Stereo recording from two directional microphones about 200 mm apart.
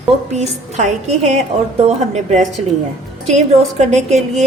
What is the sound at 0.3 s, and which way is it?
A woman's voice, 35° right (ahead or behind).